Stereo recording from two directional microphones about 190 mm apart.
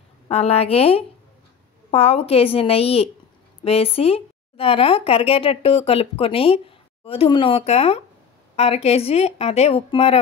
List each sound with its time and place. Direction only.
0.3 s speech: 30° left (ahead or behind)